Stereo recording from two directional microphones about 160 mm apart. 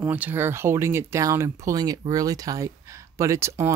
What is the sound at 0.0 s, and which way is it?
Speech, 10° right (ahead or behind).